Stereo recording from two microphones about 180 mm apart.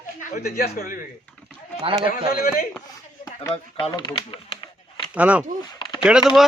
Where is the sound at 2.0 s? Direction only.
50° left (ahead or behind).